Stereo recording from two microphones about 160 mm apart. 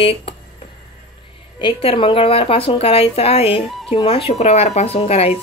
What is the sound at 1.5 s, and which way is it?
A woman's voice, 30° left (ahead or behind).